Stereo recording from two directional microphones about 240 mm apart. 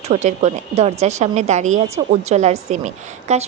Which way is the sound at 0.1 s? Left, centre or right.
Right.